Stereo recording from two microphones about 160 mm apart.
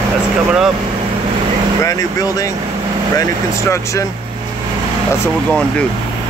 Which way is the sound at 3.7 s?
20° left (ahead or behind).